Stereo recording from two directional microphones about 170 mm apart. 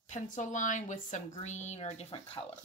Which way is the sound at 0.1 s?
45° left (ahead or behind).